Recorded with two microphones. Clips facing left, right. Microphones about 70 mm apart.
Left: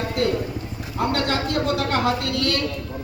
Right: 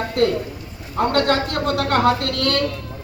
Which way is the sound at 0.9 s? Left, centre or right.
Right.